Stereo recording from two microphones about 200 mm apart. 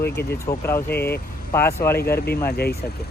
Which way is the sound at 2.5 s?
55° left (ahead or behind).